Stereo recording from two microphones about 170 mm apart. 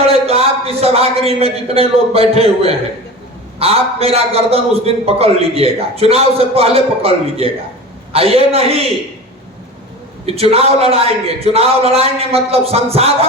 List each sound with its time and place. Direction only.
0.1 s a man's voice: 35° right (ahead or behind)
10.2 s a man's voice: 35° right (ahead or behind)